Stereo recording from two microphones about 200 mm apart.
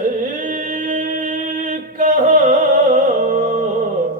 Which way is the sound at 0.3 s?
40° right (ahead or behind).